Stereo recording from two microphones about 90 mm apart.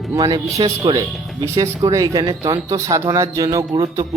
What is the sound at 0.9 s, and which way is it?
Speech, 60° right (ahead or behind).